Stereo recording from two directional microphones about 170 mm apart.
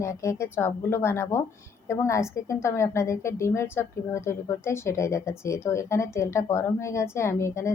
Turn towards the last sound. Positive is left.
turn(degrees=15)  # may be behind; listen again after turning